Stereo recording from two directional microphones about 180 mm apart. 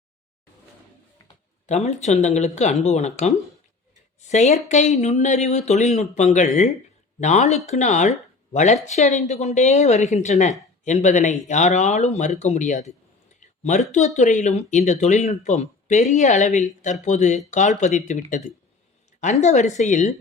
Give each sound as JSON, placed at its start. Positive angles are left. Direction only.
{"t": 1.6, "sound": "speech", "side_deg": 40}
{"t": 13.4, "sound": "a sound", "side_deg": 40}
{"t": 13.9, "sound": "speech", "side_deg": 40}